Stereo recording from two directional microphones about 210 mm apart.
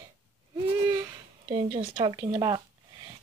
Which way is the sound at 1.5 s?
25° right (ahead or behind).